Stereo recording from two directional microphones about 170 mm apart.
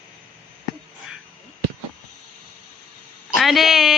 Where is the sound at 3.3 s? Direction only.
Centre (ahead or behind).